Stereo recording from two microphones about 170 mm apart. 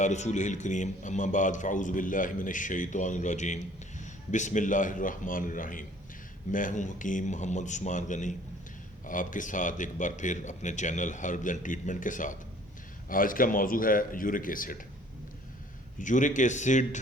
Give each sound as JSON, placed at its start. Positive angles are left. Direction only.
{"t": 0.0, "sound": "a man's voice", "side_deg": 45}
{"t": 16.0, "sound": "a man's voice", "side_deg": 50}